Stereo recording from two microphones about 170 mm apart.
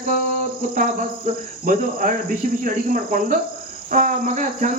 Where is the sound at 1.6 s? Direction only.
55° right (ahead or behind).